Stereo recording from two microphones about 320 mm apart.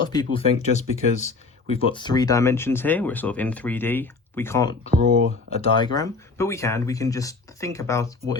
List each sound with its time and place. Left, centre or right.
0.0 s speech: centre
4.9 s speech: right
5.5 s speech: centre